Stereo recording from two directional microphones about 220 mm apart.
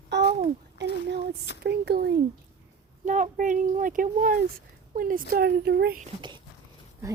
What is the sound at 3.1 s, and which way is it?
Speech, 35° right (ahead or behind).